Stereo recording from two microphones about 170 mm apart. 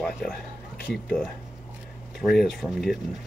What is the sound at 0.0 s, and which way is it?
Speech, centre (ahead or behind).